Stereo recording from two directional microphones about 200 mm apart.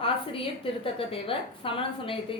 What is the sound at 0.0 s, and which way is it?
A woman's voice, 25° left (ahead or behind).